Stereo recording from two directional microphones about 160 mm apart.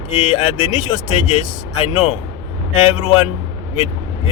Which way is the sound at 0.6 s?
35° left (ahead or behind).